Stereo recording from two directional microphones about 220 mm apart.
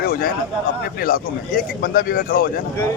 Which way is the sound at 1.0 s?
40° left (ahead or behind).